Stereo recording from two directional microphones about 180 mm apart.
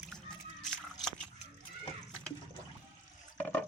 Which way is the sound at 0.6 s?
5° left (ahead or behind).